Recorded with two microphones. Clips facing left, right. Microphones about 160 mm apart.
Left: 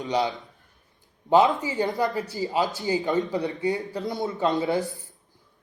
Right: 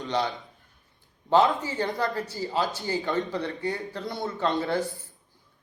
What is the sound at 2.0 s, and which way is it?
Speech, centre (ahead or behind).